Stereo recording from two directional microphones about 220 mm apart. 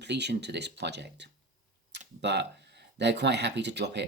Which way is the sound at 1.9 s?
50° right (ahead or behind).